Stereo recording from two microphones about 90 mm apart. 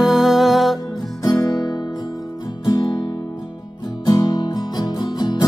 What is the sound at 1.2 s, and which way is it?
Music, 45° left (ahead or behind).